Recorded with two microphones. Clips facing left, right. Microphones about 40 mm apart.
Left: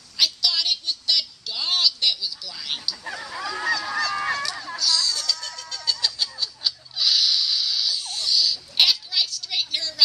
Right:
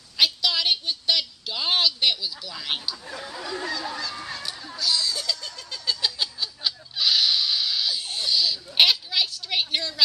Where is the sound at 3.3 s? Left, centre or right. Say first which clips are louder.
Left 6 dB; left.